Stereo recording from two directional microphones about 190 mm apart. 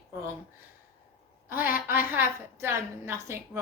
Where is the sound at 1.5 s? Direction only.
10° right (ahead or behind).